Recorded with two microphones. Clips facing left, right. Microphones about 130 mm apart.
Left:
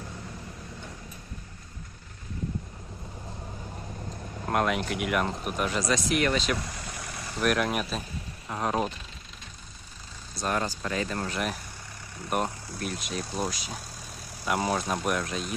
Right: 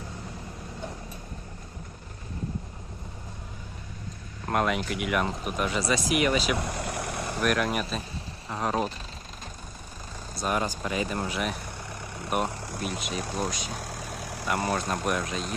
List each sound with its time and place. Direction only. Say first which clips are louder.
4.4 s speech: even; centre (ahead or behind)
6.6 s vehicle: right 7 dB; 65° right (ahead or behind)
7.4 s speech: left 1 dB; centre (ahead or behind)
10.3 s speech: right 1 dB; 10° right (ahead or behind)
11.3 s speech: right 1 dB; centre (ahead or behind)
11.9 s vehicle: right 5 dB; 65° right (ahead or behind)
12.5 s vehicle: right 4 dB; 75° right (ahead or behind)
13.0 s speech: even; centre (ahead or behind)
13.7 s vehicle: right 5 dB; 90° right
14.4 s speech: left 1 dB; centre (ahead or behind)